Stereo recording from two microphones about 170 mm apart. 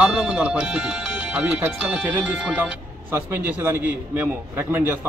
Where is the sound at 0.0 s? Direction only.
5° right (ahead or behind).